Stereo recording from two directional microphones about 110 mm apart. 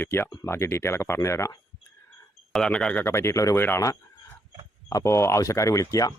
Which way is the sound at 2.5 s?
10° left (ahead or behind).